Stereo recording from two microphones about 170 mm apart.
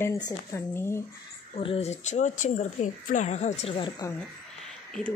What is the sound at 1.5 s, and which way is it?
A woman's voice, 35° left (ahead or behind).